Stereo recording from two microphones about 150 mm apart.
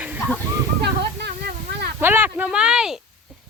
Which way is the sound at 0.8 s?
90° right.